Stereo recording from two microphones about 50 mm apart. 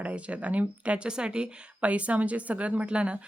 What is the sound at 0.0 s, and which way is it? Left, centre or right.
Speech, right.